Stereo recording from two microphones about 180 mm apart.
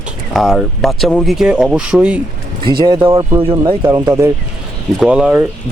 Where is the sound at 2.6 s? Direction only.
25° right (ahead or behind).